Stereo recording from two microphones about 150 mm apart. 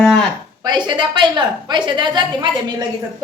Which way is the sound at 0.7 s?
30° right (ahead or behind).